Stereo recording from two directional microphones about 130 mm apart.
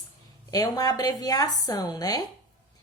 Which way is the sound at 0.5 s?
30° left (ahead or behind).